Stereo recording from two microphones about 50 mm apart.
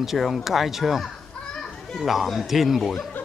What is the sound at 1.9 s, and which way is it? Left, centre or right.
Speech, centre.